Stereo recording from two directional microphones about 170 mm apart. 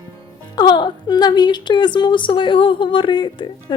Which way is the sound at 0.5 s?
25° left (ahead or behind).